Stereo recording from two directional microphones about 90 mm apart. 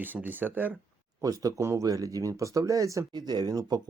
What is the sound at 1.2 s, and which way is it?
Speech, 40° right (ahead or behind).